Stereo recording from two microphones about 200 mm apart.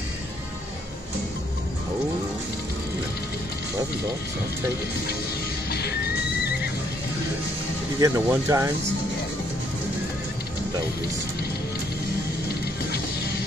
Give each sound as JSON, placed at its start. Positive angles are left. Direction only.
{"t": 5.7, "sound": "music", "side_deg": 55}
{"t": 8.0, "sound": "speech", "side_deg": -15}